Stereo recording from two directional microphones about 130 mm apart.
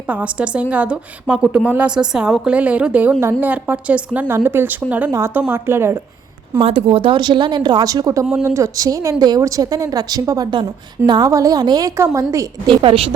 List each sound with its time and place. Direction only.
0.1 s a woman's voice: 10° right (ahead or behind)
6.6 s speech: 45° right (ahead or behind); by 12.2 s 25° right (ahead or behind)
12.6 s a woman's voice: 45° right (ahead or behind)